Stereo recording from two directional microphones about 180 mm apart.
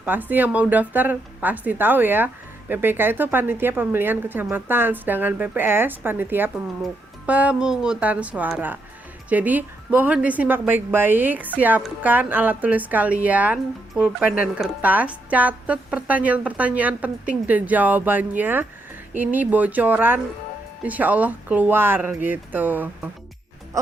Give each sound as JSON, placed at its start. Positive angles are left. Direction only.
{"t": 0.0, "sound": "a woman's voice", "side_deg": -10}